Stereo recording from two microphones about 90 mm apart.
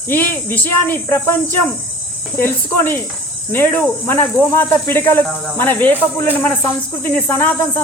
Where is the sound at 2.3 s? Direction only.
25° left (ahead or behind).